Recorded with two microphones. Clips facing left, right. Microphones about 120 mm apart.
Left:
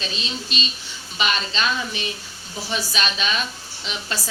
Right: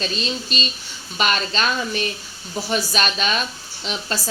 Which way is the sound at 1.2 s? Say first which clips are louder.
Right 2 dB; 45° right (ahead or behind).